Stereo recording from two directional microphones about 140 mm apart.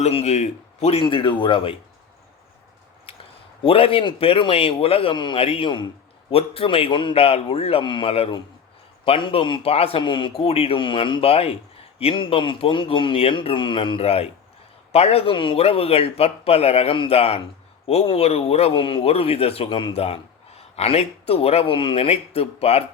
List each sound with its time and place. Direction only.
0.0 s speech: 50° left (ahead or behind)
1.0 s speech: 35° left (ahead or behind)
3.1 s a sound: 40° left (ahead or behind)
3.6 s speech: 40° left (ahead or behind)